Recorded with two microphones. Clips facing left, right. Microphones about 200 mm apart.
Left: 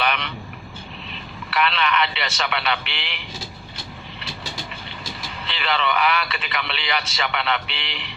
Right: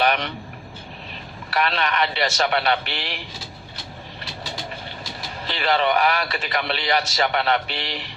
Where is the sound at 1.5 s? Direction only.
45° right (ahead or behind).